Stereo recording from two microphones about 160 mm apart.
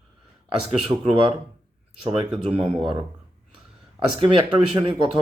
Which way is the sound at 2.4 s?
35° right (ahead or behind).